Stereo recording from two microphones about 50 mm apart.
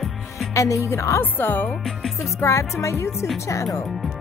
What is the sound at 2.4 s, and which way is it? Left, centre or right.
Speech, left.